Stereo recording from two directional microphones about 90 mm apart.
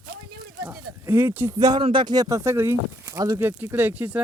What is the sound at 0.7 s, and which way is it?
Speech, 25° right (ahead or behind).